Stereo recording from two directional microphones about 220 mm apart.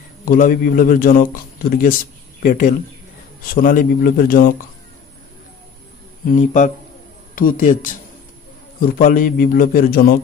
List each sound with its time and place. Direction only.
0.2 s a man's voice: 40° left (ahead or behind)
6.2 s a man's voice: 35° left (ahead or behind)